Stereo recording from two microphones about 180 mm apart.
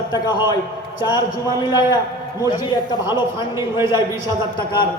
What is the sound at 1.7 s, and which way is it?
A man's voice, 25° left (ahead or behind).